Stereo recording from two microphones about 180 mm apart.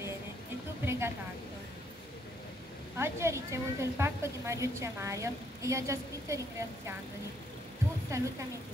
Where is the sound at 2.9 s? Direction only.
15° right (ahead or behind).